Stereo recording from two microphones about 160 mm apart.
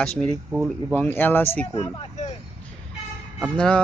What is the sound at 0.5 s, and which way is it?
Speech, 5° right (ahead or behind).